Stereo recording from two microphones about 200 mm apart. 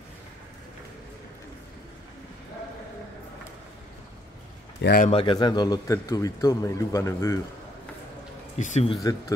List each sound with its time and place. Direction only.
4.8 s speech: 45° left (ahead or behind)
5.1 s a man's voice: 25° left (ahead or behind)
8.5 s speech: 35° left (ahead or behind)